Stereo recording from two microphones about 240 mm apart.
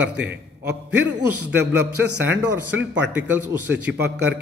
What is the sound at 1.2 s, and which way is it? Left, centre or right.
Speech, right.